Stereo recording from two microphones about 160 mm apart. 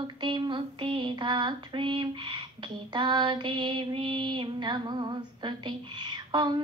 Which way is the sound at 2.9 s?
30° right (ahead or behind).